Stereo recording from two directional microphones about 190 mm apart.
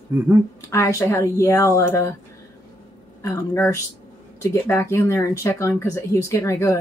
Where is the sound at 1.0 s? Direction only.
10° left (ahead or behind).